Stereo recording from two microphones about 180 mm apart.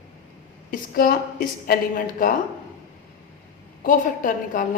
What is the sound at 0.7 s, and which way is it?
A woman's voice, 55° left (ahead or behind).